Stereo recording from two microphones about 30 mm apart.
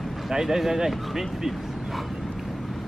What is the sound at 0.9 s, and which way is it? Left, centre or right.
Vehicle, centre.